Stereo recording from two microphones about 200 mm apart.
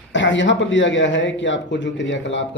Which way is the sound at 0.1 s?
65° left (ahead or behind).